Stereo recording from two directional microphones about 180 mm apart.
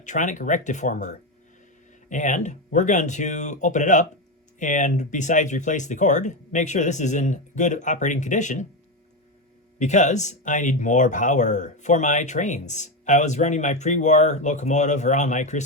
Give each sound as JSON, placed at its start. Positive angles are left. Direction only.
{"t": 0.0, "sound": "speech", "side_deg": 45}
{"t": 9.7, "sound": "speech", "side_deg": 40}